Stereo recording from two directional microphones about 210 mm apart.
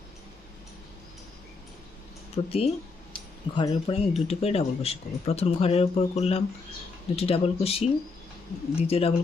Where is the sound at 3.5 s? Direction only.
25° left (ahead or behind).